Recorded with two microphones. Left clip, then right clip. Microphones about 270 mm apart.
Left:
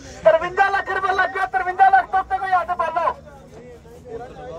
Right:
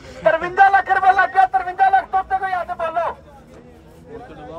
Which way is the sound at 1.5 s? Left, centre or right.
Centre.